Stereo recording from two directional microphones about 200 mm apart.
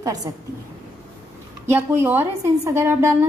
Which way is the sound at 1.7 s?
10° right (ahead or behind).